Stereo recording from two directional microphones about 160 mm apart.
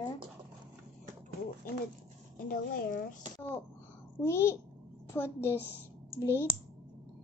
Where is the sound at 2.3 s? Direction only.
65° left (ahead or behind).